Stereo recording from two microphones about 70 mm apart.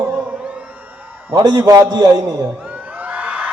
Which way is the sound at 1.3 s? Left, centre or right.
Right.